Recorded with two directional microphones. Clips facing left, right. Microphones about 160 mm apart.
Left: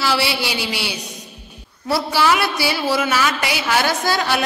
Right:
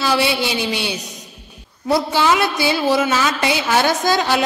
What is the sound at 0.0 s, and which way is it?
A woman's voice, 20° right (ahead or behind).